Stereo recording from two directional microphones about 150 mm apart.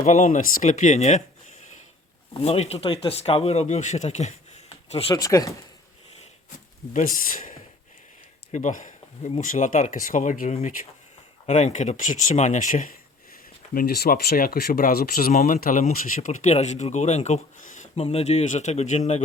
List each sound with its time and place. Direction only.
0.0 s speech: 55° left (ahead or behind)
2.4 s speech: 45° left (ahead or behind)
5.1 s speech: 25° left (ahead or behind)
6.9 s speech: 65° left (ahead or behind)
8.5 s speech: 55° left (ahead or behind)
13.7 s speech: 90° left
15.4 s speech: 50° left (ahead or behind)
15.6 s speech: 65° left (ahead or behind)